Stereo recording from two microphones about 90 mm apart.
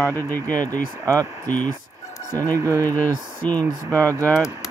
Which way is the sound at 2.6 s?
35° right (ahead or behind).